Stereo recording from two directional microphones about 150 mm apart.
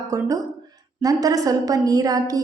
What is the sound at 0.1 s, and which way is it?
A woman's voice, 20° right (ahead or behind).